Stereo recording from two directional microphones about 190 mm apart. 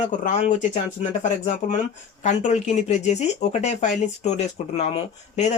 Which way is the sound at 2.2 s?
40° left (ahead or behind).